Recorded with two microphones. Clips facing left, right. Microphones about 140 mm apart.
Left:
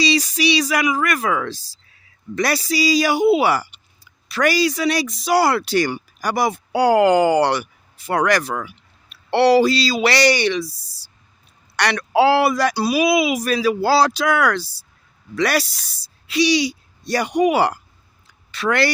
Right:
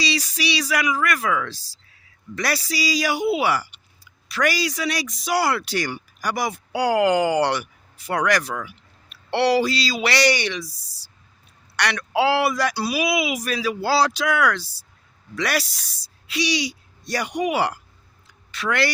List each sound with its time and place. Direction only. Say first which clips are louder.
0.0 s a woman's voice: left 7 dB; 20° left (ahead or behind)
12.7 s speech: left 5 dB; 25° left (ahead or behind)
13.1 s a woman's voice: left 6 dB; 35° left (ahead or behind)